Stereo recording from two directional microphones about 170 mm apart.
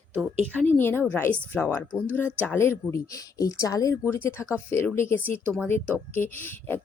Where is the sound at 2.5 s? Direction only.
15° left (ahead or behind).